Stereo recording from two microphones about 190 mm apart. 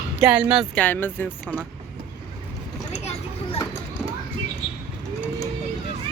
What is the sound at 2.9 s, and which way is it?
Vehicle, 35° left (ahead or behind).